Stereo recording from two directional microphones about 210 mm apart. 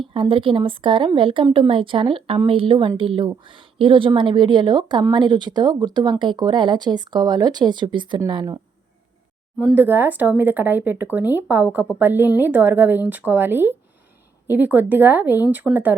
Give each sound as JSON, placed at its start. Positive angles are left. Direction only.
{"t": 0.1, "sound": "speech", "side_deg": -25}
{"t": 9.6, "sound": "speech", "side_deg": -5}